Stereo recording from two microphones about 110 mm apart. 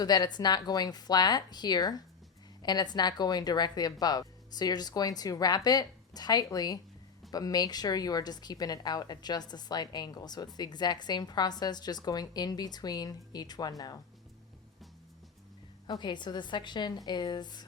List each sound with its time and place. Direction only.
0.0 s a woman's voice: 40° left (ahead or behind)
15.9 s a woman's voice: 45° left (ahead or behind)